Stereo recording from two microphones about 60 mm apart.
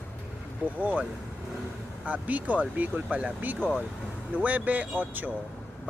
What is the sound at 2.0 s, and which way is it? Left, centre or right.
Speech, right.